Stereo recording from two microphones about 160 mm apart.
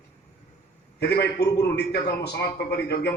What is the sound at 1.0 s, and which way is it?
A man's voice, 90° left.